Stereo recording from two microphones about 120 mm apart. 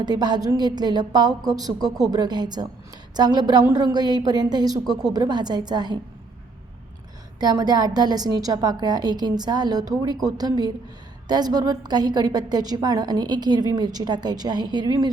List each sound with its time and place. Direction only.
0.0 s a woman's voice: 35° right (ahead or behind)
7.3 s a woman's voice: 35° right (ahead or behind)